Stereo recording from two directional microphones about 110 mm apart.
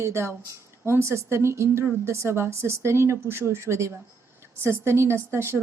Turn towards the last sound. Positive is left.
turn(degrees=-25)  # may be behind; listen again after turning